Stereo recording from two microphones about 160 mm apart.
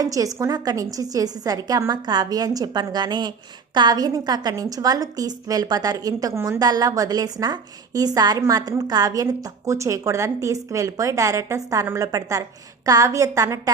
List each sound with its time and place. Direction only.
0.0 s a woman's voice: 20° right (ahead or behind)